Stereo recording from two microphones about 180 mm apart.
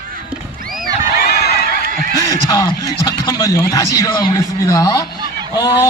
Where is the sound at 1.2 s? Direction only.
60° left (ahead or behind).